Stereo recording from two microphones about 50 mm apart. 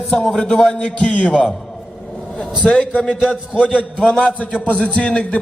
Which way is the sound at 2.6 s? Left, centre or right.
Centre.